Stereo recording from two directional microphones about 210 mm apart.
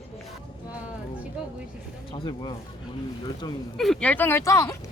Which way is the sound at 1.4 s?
5° right (ahead or behind).